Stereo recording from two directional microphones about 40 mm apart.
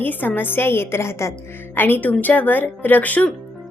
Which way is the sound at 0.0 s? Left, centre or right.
Left.